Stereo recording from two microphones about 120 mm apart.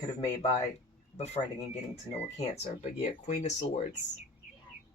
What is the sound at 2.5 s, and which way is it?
Speech, 70° left (ahead or behind).